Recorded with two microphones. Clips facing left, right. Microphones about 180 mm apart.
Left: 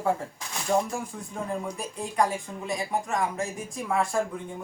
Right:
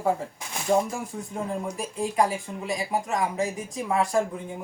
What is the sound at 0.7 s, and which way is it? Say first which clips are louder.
Speech: right 2 dB; 20° right (ahead or behind).